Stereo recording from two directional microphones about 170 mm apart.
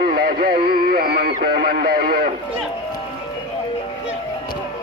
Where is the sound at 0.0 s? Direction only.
60° right (ahead or behind).